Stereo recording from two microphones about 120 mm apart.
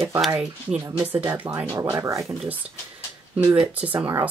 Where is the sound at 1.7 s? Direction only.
25° right (ahead or behind).